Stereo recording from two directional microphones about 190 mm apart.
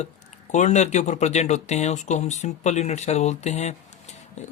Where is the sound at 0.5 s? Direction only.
40° left (ahead or behind).